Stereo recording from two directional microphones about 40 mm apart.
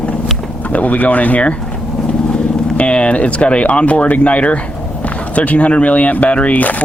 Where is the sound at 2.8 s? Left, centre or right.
Left.